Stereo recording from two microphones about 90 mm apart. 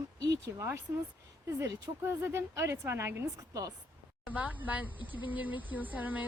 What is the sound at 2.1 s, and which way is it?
A woman's voice, 25° right (ahead or behind).